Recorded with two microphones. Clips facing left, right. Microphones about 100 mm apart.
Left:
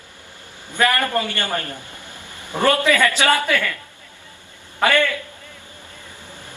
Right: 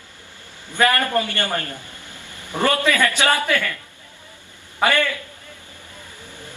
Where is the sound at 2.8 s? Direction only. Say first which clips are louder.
Left 2 dB; 20° left (ahead or behind).